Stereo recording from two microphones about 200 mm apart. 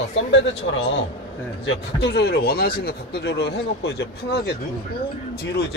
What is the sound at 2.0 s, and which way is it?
A man's voice, 55° left (ahead or behind).